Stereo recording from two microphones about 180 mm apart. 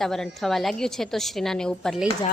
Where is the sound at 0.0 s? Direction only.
Centre (ahead or behind).